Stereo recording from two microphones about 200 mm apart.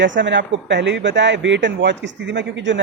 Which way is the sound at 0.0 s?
65° right (ahead or behind).